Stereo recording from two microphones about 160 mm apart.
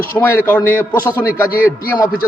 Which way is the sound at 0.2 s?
15° left (ahead or behind).